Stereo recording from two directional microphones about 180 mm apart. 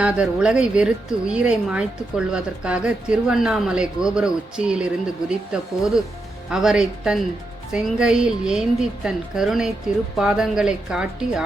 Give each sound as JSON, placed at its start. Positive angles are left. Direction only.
{"t": 0.0, "sound": "speech", "side_deg": -5}